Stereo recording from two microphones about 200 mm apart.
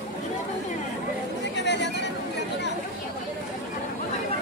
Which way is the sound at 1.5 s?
60° left (ahead or behind).